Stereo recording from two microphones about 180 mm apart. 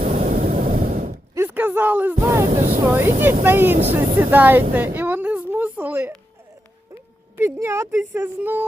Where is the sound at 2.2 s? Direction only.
15° right (ahead or behind).